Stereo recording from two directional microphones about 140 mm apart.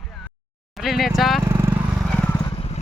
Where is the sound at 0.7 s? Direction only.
Centre (ahead or behind).